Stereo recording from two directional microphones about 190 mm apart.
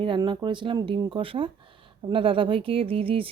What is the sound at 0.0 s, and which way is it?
Speech, 25° right (ahead or behind).